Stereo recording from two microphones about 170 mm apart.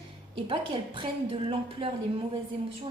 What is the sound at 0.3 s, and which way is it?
A woman's voice, 30° right (ahead or behind).